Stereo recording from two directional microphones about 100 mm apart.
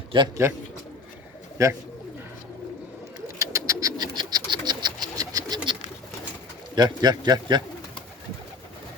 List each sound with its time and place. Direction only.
0.1 s a man's voice: 55° right (ahead or behind)
1.6 s speech: 30° right (ahead or behind)
3.3 s bird: 35° right (ahead or behind)
6.7 s speech: 45° right (ahead or behind)